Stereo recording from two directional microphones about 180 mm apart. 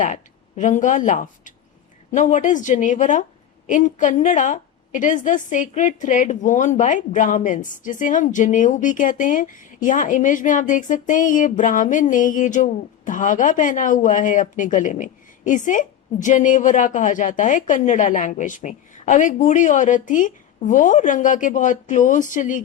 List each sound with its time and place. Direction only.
0.0 s a woman's voice: 45° left (ahead or behind)